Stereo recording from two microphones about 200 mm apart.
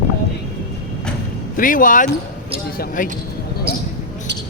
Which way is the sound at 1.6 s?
40° left (ahead or behind).